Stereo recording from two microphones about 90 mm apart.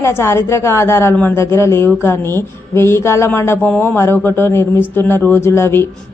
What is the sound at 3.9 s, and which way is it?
A woman's voice, 25° left (ahead or behind).